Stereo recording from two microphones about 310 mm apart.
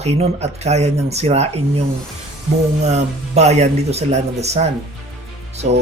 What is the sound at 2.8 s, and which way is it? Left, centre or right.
Speech, right.